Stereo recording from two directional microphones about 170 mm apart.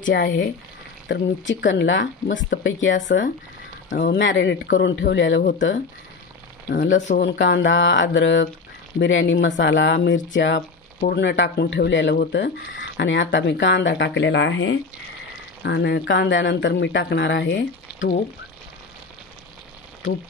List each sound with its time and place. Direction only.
0.1 s speech: 90° left
6.7 s speech: 55° left (ahead or behind)
7.2 s speech: 90° left
11.0 s speech: 75° left (ahead or behind)